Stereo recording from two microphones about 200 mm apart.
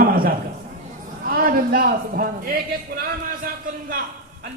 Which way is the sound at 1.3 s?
45° right (ahead or behind).